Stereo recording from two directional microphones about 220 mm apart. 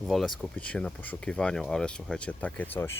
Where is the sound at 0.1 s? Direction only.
Centre (ahead or behind).